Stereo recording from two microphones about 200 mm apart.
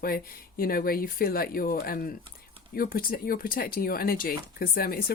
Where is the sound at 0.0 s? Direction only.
45° left (ahead or behind).